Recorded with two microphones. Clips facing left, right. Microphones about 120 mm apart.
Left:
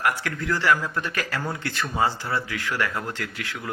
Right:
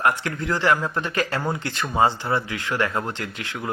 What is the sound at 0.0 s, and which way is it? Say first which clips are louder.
Speech: right 3 dB; 25° right (ahead or behind).